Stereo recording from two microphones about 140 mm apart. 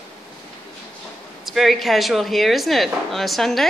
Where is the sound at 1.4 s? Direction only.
Centre (ahead or behind).